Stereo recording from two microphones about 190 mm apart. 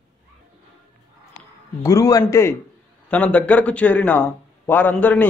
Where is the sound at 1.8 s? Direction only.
15° left (ahead or behind).